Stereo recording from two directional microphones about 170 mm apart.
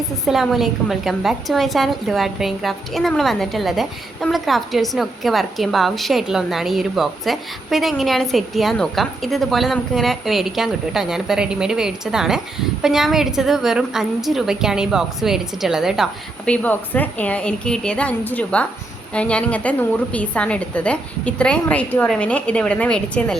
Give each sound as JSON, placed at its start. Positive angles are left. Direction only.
{"t": 0.3, "sound": "a woman's voice", "side_deg": 0}
{"t": 16.5, "sound": "a woman's voice", "side_deg": 10}